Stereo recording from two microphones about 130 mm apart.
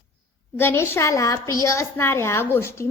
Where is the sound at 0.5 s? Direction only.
15° left (ahead or behind).